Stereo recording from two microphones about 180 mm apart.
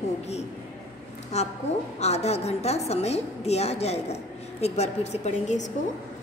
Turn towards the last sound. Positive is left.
turn(degrees=40)  # may be behind; listen again after turning